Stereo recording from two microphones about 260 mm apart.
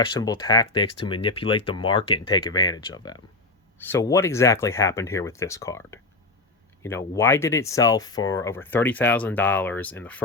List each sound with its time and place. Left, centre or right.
0.0 s speech: centre